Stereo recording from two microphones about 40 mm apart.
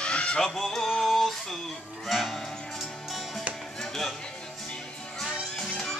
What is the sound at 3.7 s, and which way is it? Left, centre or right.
Music, centre.